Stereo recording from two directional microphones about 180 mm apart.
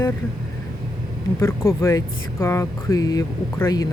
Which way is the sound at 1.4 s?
15° left (ahead or behind).